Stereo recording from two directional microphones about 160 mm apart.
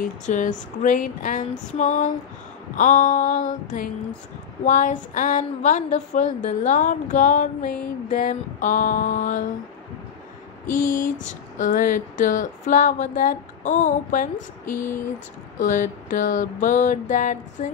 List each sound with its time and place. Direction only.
0.0 s a woman's voice: 50° left (ahead or behind)
10.7 s speech: 60° left (ahead or behind)